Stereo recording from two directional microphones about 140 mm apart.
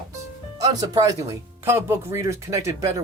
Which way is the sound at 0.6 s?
25° right (ahead or behind).